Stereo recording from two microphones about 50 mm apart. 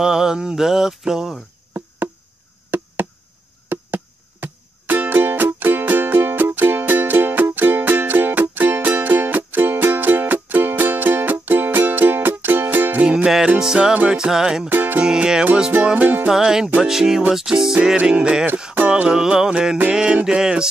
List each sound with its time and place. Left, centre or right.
0.0 s mantra: centre
2.7 s chop: right
3.6 s music: right
13.0 s music: right
13.6 s mantra: centre
14.7 s music: right
15.0 s mantra: centre
15.8 s music: right
16.3 s mantra: centre
18.1 s music: right
19.0 s mantra: centre